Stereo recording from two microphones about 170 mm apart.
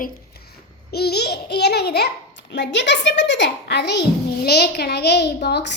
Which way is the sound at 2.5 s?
90° left.